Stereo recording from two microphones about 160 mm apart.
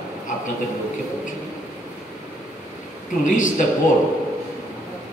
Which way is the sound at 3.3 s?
55° left (ahead or behind).